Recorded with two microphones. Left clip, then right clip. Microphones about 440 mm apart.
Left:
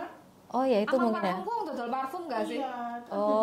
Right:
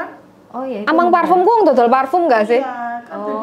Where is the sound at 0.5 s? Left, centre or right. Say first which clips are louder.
Right 2 dB; left.